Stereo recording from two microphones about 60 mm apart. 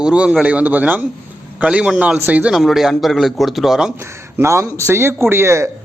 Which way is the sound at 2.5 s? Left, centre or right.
Centre.